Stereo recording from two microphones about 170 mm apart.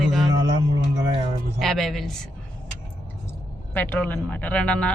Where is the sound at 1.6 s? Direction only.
Centre (ahead or behind).